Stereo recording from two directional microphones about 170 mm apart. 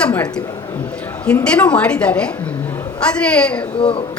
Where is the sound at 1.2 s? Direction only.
5° left (ahead or behind).